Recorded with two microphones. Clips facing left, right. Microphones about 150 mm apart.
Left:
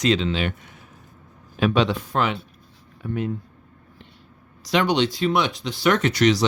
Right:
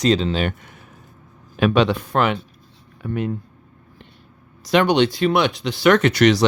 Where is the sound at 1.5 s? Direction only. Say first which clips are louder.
Right 3 dB; 65° right (ahead or behind).